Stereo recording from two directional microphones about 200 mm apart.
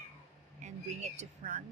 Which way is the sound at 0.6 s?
35° right (ahead or behind).